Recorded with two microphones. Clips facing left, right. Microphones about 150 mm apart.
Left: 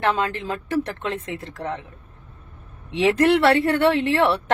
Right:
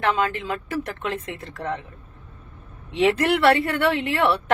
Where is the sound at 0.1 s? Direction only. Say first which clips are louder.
Even; 30° left (ahead or behind).